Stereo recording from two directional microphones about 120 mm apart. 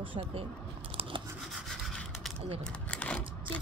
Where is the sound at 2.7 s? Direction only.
10° left (ahead or behind).